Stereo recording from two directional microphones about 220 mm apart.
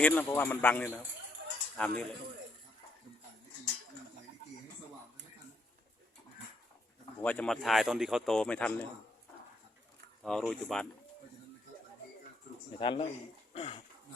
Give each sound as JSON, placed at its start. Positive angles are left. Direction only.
{"t": 0.0, "sound": "a man's voice", "side_deg": 10}
{"t": 7.2, "sound": "a man's voice", "side_deg": 5}
{"t": 10.2, "sound": "a man's voice", "side_deg": 0}
{"t": 12.8, "sound": "speech", "side_deg": 25}